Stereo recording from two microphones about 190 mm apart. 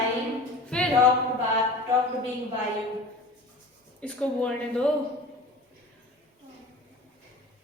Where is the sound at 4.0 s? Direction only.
5° left (ahead or behind).